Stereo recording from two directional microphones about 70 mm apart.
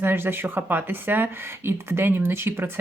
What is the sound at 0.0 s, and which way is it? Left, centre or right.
Speech, right.